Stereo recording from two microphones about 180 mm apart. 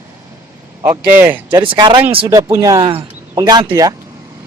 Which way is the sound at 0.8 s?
10° right (ahead or behind).